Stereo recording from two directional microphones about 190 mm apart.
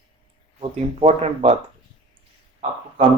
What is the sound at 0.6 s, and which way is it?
Speech, 30° right (ahead or behind).